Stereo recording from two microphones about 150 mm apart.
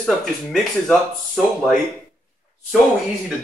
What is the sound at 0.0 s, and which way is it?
A man's voice, 5° left (ahead or behind).